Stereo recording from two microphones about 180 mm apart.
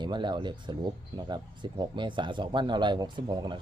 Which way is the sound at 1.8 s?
25° right (ahead or behind).